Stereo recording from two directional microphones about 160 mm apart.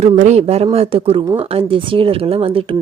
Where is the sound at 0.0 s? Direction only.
45° right (ahead or behind).